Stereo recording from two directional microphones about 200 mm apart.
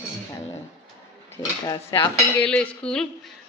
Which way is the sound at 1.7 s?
20° left (ahead or behind).